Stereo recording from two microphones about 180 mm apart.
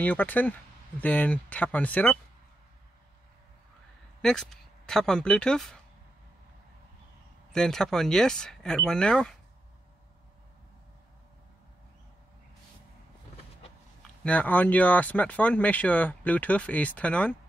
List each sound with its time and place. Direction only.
0.0 s speech: 10° left (ahead or behind)
4.2 s speech: 5° left (ahead or behind)
7.5 s speech: 5° left (ahead or behind)
14.2 s speech: 10° left (ahead or behind)